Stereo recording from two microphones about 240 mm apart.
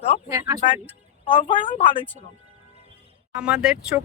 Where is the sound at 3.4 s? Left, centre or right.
Centre.